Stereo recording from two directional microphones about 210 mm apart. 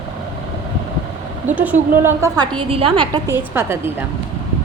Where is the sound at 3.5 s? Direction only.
10° right (ahead or behind).